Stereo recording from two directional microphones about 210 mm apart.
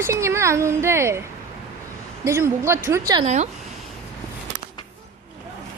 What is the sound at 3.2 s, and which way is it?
Speech, 35° right (ahead or behind).